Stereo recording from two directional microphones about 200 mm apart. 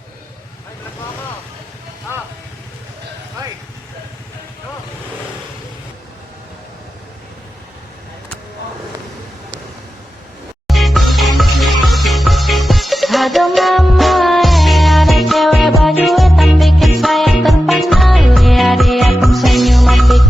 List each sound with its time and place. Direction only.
10.7 s music: centre (ahead or behind)